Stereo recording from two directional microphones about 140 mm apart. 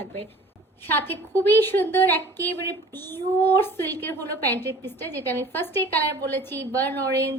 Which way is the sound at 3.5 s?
15° left (ahead or behind).